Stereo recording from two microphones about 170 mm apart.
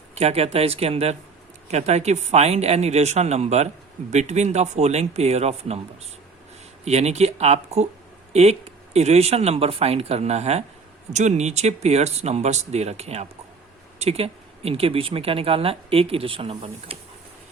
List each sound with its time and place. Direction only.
0.1 s speech: 40° right (ahead or behind)
6.8 s speech: 40° right (ahead or behind)